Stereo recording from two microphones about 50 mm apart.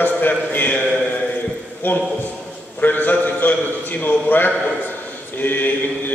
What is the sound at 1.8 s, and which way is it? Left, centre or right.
A man's voice, left.